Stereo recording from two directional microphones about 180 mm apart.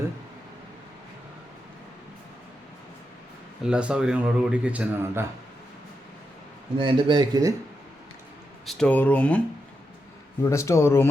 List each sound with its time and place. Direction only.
3.6 s speech: 5° right (ahead or behind)
6.7 s speech: 25° right (ahead or behind)
8.6 s speech: 5° left (ahead or behind)
10.4 s speech: 15° left (ahead or behind)